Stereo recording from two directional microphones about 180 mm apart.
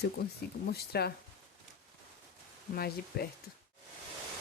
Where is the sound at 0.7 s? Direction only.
60° left (ahead or behind).